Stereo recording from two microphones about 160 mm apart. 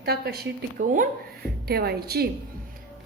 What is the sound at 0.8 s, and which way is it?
Speech, 50° right (ahead or behind).